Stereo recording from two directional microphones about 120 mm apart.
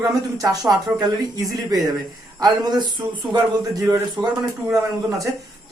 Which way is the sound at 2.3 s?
35° right (ahead or behind).